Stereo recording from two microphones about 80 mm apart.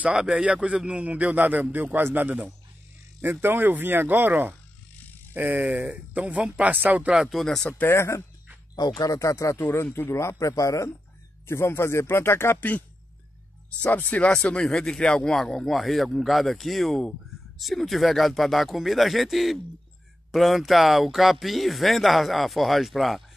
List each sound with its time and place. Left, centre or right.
0.0 s a man's voice: centre
7.2 s speech: centre
7.7 s speech: left
8.7 s speech: left
11.4 s speech: left; by 23.2 s centre